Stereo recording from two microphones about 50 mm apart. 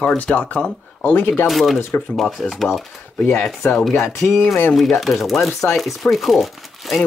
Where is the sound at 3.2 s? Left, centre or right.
Left.